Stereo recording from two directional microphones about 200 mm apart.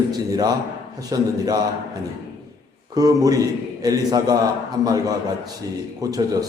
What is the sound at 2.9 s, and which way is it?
A man's voice, 20° right (ahead or behind).